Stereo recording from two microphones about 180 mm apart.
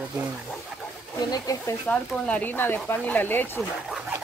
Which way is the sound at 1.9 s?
5° left (ahead or behind).